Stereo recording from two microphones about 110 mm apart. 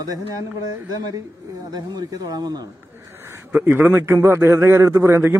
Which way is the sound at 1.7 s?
35° right (ahead or behind).